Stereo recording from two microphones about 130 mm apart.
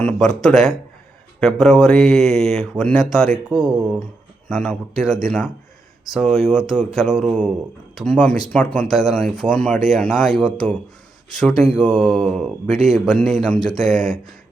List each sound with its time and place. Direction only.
0.0 s speech: 5° left (ahead or behind)
3.6 s speech: 40° right (ahead or behind)
4.0 s speech: 5° left (ahead or behind)